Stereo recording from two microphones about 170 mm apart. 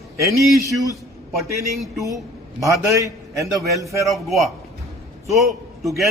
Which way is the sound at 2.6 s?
20° right (ahead or behind).